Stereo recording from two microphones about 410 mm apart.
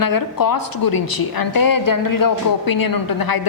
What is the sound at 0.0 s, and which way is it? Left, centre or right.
A woman's voice, left.